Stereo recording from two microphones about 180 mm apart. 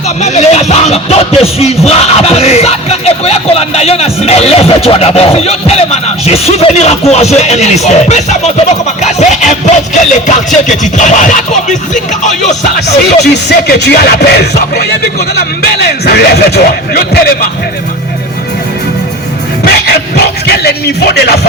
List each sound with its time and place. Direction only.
0.2 s music: 40° left (ahead or behind)
13.3 s speech: 70° left (ahead or behind)
19.6 s music: 65° left (ahead or behind)